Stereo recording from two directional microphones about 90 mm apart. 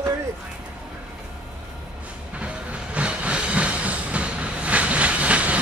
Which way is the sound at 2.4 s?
15° right (ahead or behind).